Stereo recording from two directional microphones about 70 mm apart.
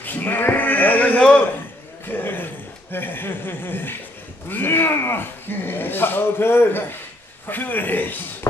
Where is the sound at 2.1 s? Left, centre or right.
Left.